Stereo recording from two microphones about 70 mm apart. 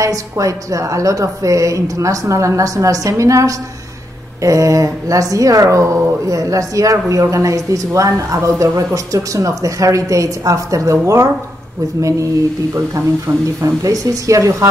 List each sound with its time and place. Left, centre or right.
0.0 s speech: right
13.6 s speech: right